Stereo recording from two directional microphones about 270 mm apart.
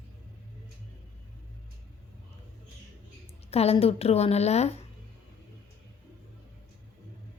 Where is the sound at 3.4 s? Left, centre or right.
Left.